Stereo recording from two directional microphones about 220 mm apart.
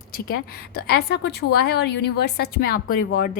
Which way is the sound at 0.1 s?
45° left (ahead or behind).